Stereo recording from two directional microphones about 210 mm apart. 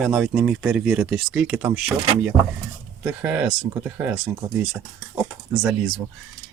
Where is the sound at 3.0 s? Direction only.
5° right (ahead or behind).